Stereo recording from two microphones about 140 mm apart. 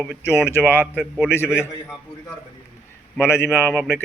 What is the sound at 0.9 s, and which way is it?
Speech, 10° right (ahead or behind).